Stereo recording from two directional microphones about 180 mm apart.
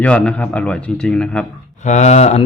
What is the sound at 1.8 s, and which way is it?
Speech, 40° left (ahead or behind).